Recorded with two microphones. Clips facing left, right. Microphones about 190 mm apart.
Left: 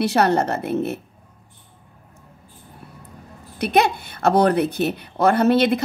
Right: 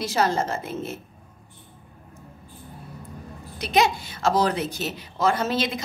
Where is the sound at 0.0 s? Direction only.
65° left (ahead or behind).